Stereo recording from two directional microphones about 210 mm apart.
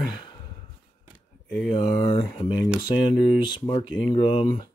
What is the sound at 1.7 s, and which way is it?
Speech, 25° left (ahead or behind).